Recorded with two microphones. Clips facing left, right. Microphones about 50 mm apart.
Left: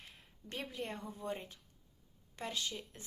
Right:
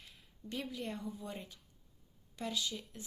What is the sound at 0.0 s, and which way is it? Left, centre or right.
Speech, left.